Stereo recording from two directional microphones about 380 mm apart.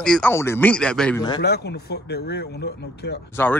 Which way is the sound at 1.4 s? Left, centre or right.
Left.